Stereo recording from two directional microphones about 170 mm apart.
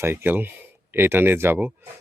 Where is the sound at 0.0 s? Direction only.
15° right (ahead or behind).